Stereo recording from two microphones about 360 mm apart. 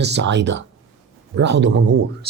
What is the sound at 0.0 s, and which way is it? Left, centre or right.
Speech, right.